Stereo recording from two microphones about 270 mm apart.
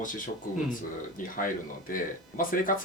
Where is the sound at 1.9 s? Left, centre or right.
Left.